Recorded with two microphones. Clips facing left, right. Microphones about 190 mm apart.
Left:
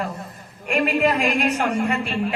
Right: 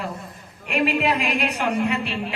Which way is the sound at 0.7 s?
50° left (ahead or behind).